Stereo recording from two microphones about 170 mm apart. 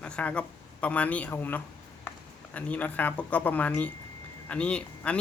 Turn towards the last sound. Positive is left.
turn(degrees=5)  # may be behind; listen again after turning